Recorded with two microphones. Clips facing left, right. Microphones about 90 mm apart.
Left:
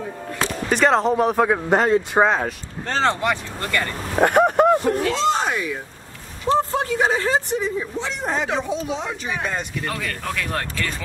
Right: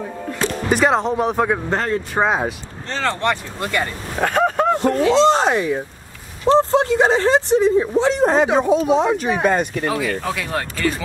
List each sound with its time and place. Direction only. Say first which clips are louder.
0.7 s speech: even; 5° right (ahead or behind)
1.7 s speech: left 4 dB; 15° left (ahead or behind)
2.2 s speech: right 1 dB; 5° right (ahead or behind)
3.2 s speech: right 2 dB; 5° left (ahead or behind)
3.6 s speech: right 2 dB; 15° right (ahead or behind)
4.2 s a sound: left 2 dB; 10° left (ahead or behind)
5.0 s speech: right 6 dB; 30° right (ahead or behind)
7.3 s speech: right 8 dB; 80° right
7.8 s speech: right 11 dB; 40° right (ahead or behind)
8.5 s speech: right 10 dB; 50° right (ahead or behind)
9.8 s speech: right 6 dB; 10° right (ahead or behind)